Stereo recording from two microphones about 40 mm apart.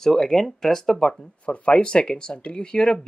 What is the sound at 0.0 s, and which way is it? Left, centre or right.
Speech, centre.